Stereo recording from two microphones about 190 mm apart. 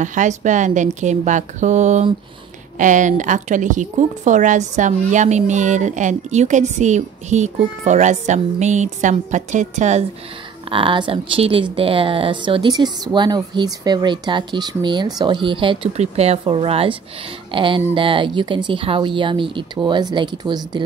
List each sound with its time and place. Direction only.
0.0 s a woman's voice: 40° right (ahead or behind)
10.7 s a woman's voice: 25° right (ahead or behind)